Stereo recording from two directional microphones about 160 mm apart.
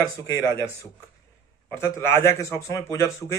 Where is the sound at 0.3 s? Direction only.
15° left (ahead or behind).